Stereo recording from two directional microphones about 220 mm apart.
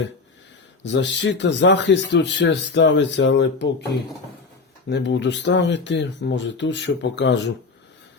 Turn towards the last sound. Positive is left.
turn(degrees=55)  # may be behind; listen again after turning